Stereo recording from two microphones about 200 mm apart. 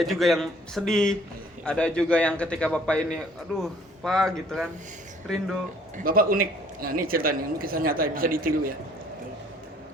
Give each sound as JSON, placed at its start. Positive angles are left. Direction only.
{"t": 0.0, "sound": "a man's voice", "side_deg": 0}
{"t": 6.0, "sound": "a man's voice", "side_deg": -45}